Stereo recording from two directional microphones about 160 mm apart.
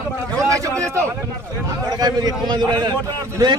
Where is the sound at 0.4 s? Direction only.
20° right (ahead or behind).